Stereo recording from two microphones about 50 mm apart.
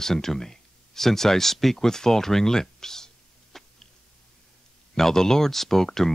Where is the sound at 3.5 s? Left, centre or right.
Centre.